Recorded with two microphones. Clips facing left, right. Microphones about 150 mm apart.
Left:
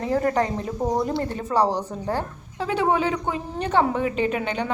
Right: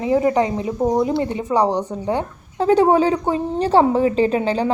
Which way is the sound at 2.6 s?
40° right (ahead or behind).